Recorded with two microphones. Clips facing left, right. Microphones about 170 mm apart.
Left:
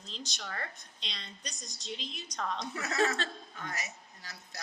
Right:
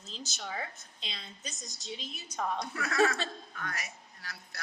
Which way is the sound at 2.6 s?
20° left (ahead or behind).